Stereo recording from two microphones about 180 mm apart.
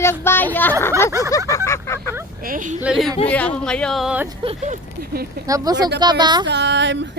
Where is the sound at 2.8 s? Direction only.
5° right (ahead or behind).